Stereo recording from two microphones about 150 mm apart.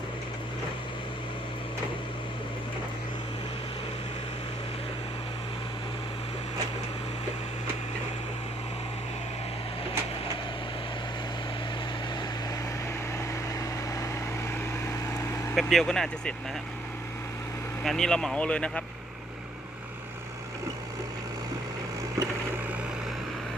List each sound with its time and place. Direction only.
13.1 s vehicle: 20° left (ahead or behind)
15.5 s speech: 5° left (ahead or behind)
17.8 s speech: 5° left (ahead or behind)